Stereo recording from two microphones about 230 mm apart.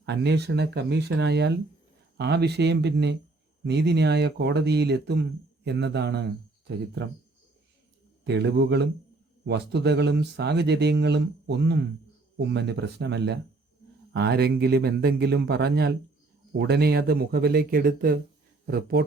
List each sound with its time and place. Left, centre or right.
0.0 s speech: right
8.3 s speech: right